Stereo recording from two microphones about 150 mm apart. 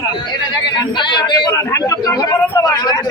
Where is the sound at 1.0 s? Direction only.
30° left (ahead or behind).